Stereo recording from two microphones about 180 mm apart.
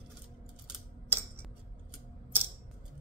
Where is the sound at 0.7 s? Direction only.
10° right (ahead or behind).